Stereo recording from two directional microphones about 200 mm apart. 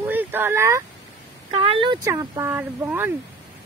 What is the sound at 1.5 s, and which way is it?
Speech, 30° right (ahead or behind).